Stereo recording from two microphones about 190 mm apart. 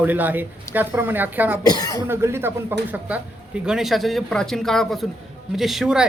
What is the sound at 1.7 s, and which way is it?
Speech, 20° left (ahead or behind).